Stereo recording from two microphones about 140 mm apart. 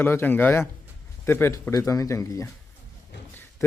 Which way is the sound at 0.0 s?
15° left (ahead or behind).